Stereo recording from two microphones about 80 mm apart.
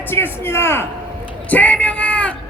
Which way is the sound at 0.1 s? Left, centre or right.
Left.